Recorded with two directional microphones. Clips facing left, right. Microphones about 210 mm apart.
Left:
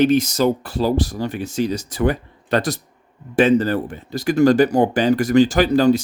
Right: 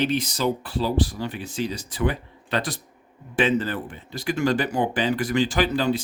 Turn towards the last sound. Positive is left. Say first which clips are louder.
# left 7 dB
turn(degrees=40)  # may be behind; listen again after turning